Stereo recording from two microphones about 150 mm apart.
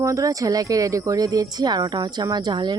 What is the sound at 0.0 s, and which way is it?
Speech, 20° right (ahead or behind).